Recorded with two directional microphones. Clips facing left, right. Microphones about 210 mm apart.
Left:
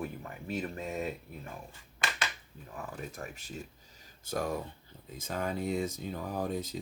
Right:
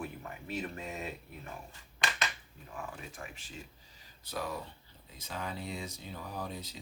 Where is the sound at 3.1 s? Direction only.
40° left (ahead or behind).